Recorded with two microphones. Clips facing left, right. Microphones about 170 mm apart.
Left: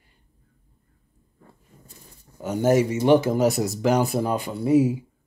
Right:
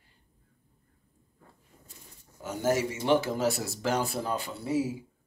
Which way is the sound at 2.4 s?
20° left (ahead or behind).